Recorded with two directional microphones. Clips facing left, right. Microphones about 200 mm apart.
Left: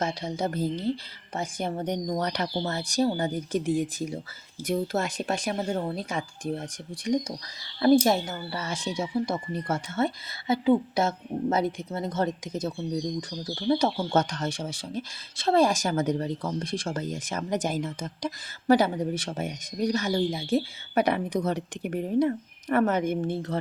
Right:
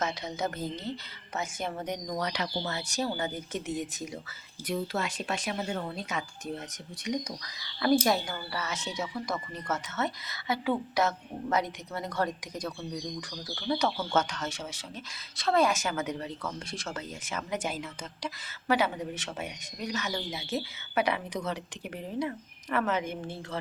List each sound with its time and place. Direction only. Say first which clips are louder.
0.0 s speech: left 3 dB; 30° left (ahead or behind)
4.7 s a woman's voice: left 5 dB; 45° left (ahead or behind)
21.5 s a woman's voice: left 8 dB; 50° left (ahead or behind)